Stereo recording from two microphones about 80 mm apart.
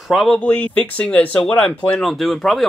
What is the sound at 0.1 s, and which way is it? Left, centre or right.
Speech, centre.